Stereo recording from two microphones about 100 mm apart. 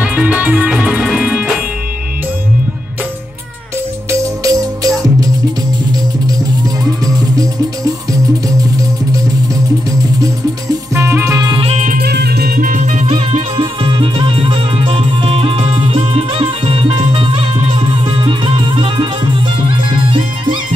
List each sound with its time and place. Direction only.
0.0 s music: 15° right (ahead or behind)
4.1 s music: 35° right (ahead or behind)
11.0 s music: 25° right (ahead or behind)
13.0 s music: 65° right (ahead or behind)